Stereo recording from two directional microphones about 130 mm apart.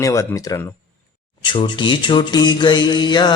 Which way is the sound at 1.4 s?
40° left (ahead or behind).